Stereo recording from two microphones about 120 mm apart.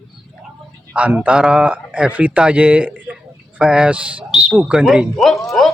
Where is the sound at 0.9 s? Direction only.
10° right (ahead or behind).